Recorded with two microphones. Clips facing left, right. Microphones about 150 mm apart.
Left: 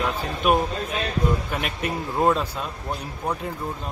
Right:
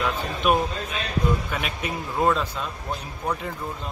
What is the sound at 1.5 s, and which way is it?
Speech, centre (ahead or behind).